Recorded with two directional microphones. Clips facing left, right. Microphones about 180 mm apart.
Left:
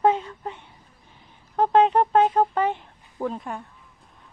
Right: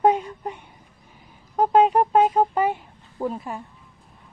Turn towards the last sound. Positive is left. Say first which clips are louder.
# right 1 dB
turn(degrees=-5)  # may be behind; listen again after turning